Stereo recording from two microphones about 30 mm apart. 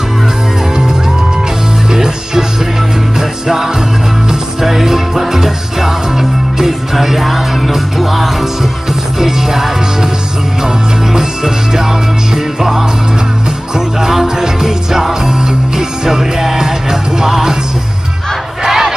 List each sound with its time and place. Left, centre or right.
3.2 s music: centre
11.1 s music: centre
14.2 s music: centre
16.1 s music: centre
18.6 s battle cry: centre